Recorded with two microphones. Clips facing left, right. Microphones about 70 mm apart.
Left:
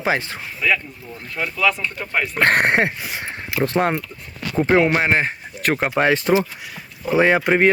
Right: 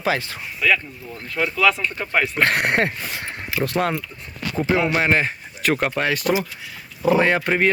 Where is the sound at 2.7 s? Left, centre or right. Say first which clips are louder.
Left 2 dB; centre.